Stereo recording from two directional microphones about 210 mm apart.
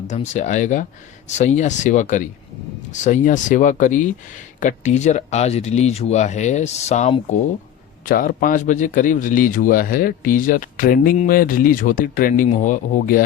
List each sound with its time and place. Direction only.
0.1 s a man's voice: 35° left (ahead or behind)